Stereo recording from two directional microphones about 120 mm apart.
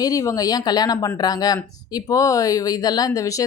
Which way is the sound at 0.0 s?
30° left (ahead or behind).